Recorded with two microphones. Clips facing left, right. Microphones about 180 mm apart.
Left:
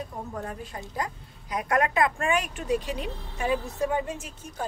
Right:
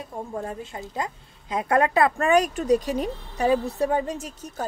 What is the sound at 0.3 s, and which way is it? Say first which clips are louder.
A woman's voice: right 4 dB; 25° right (ahead or behind).